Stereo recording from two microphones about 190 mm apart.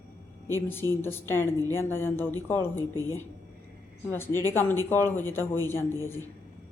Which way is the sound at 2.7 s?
20° right (ahead or behind).